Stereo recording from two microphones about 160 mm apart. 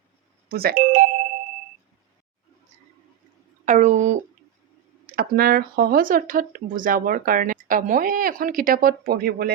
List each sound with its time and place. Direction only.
0.4 s speech: 70° right (ahead or behind)
3.7 s a sound: 50° right (ahead or behind)
5.1 s speech: 65° right (ahead or behind)